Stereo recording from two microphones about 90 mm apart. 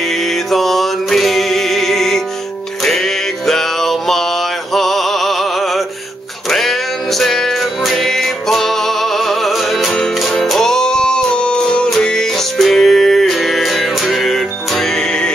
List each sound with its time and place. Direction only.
0.1 s music: 5° left (ahead or behind)